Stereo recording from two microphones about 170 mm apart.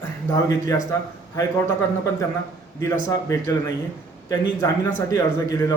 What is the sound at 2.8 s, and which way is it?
A man's voice, 15° left (ahead or behind).